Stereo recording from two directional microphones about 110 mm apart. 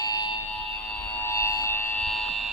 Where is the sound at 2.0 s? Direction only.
Centre (ahead or behind).